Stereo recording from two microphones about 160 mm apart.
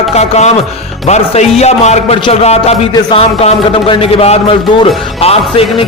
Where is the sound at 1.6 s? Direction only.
45° left (ahead or behind).